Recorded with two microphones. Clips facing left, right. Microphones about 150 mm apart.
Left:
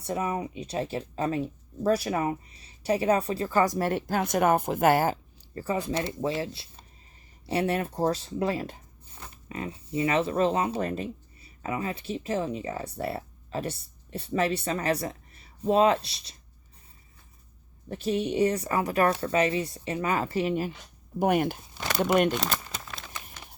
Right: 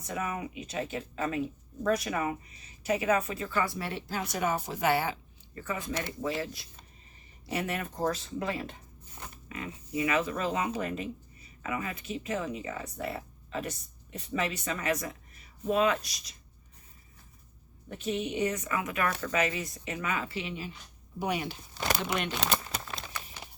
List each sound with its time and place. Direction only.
0.0 s a woman's voice: 35° left (ahead or behind)
17.8 s a woman's voice: 35° left (ahead or behind)